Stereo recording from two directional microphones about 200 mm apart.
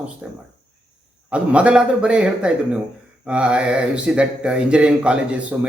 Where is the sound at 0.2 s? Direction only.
5° right (ahead or behind).